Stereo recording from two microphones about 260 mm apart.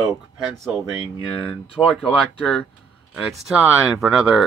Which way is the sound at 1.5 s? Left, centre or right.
Centre.